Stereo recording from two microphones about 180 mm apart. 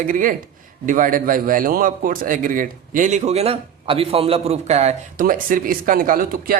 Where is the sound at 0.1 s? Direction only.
50° right (ahead or behind).